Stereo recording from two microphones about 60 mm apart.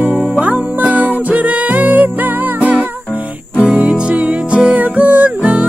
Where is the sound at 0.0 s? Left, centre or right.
Right.